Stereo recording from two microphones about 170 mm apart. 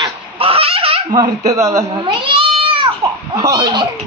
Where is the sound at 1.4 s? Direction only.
20° right (ahead or behind).